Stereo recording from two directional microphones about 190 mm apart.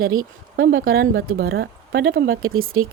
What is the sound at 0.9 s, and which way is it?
Speech, 55° right (ahead or behind).